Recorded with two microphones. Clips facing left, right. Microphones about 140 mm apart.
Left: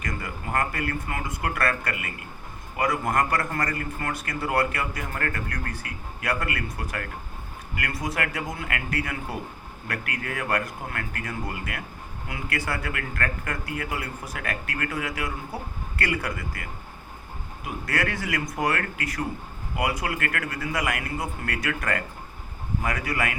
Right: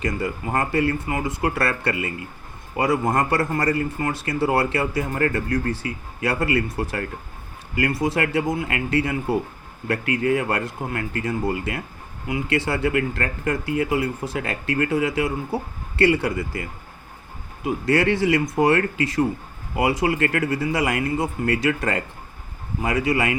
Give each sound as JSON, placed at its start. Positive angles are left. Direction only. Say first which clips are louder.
{"t": 0.0, "sound": "speech", "louder": "right 8 dB", "side_deg": -25}